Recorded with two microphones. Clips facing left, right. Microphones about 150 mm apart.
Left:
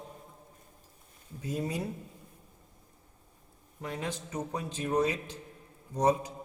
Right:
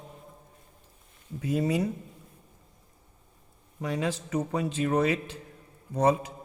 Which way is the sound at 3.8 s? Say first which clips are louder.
Right 6 dB; 90° right.